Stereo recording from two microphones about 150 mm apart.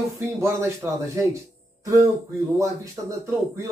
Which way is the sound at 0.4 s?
20° right (ahead or behind).